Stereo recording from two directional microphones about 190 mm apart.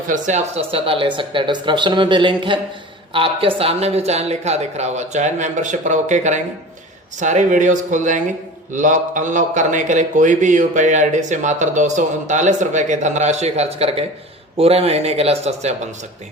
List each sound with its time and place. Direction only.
0.1 s speech: 40° right (ahead or behind)